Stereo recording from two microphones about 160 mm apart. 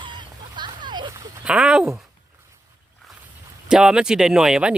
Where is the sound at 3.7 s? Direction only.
5° right (ahead or behind).